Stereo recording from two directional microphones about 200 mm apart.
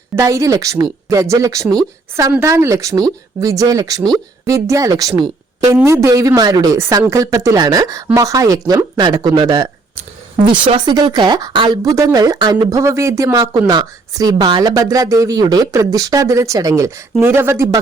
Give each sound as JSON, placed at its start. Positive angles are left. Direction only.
{"t": 0.2, "sound": "speech", "side_deg": -15}